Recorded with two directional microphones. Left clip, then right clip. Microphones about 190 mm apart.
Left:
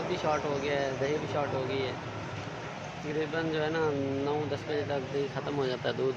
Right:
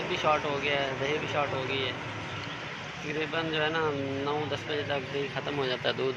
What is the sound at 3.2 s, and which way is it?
Speech, 25° left (ahead or behind).